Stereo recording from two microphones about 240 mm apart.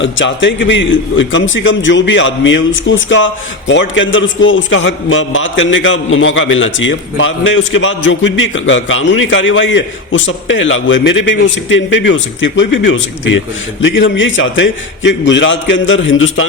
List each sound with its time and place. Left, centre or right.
0.0 s a man's voice: left